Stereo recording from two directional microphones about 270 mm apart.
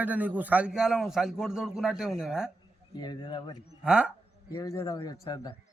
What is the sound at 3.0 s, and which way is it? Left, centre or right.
Speech, centre.